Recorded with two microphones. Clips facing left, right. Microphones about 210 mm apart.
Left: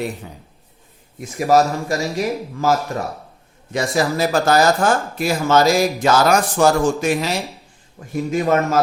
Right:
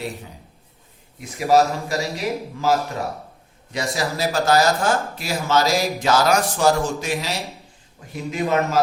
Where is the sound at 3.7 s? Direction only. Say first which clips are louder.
Left 5 dB; 50° left (ahead or behind).